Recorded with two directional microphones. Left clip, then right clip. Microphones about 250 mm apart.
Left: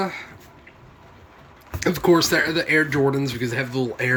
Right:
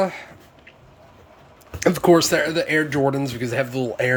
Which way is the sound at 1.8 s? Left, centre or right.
Centre.